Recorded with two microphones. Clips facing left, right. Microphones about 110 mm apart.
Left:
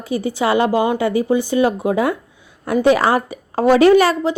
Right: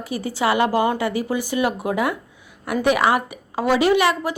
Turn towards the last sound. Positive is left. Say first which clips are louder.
# left 6 dB
turn(degrees=40)  # may be behind; listen again after turning